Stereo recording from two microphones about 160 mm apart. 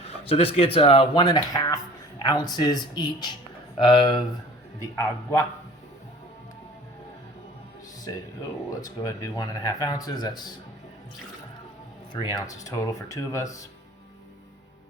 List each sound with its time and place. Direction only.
0.0 s speech: 40° left (ahead or behind)
4.8 s speech: 20° left (ahead or behind)
8.1 s speech: 25° left (ahead or behind)
12.1 s speech: 25° left (ahead or behind)